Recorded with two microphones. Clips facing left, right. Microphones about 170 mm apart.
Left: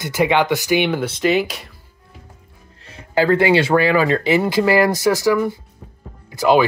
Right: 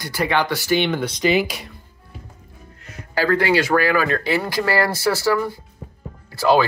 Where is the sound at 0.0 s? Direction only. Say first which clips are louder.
Left 4 dB; 20° left (ahead or behind); by 1.7 s centre (ahead or behind).